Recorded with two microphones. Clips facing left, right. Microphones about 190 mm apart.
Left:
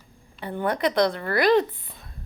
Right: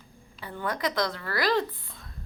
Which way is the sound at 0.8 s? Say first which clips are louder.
Left 7 dB; 60° left (ahead or behind).